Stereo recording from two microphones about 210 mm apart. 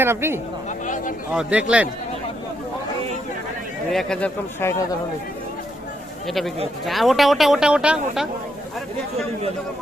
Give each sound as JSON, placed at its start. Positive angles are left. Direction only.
{"t": 0.0, "sound": "speech", "side_deg": -10}
{"t": 3.9, "sound": "speech", "side_deg": 5}
{"t": 6.2, "sound": "speech", "side_deg": 0}